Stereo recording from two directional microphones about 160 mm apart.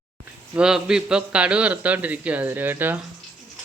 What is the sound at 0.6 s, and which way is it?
Speech, 5° right (ahead or behind).